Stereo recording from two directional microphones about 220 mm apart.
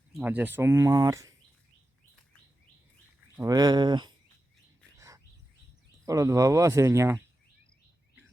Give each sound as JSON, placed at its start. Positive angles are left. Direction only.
{"t": 0.1, "sound": "speech", "side_deg": -5}
{"t": 3.3, "sound": "speech", "side_deg": -15}
{"t": 4.9, "sound": "bird", "side_deg": -15}
{"t": 6.1, "sound": "speech", "side_deg": -15}